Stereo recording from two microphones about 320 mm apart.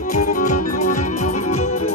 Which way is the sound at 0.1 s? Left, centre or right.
Left.